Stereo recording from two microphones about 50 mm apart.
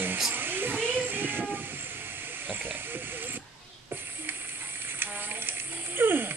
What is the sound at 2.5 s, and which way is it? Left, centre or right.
Hiss, right.